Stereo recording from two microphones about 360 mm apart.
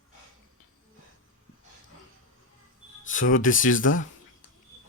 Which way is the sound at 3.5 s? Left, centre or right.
Left.